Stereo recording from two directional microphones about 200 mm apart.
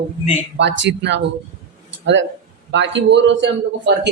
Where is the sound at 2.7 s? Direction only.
65° right (ahead or behind).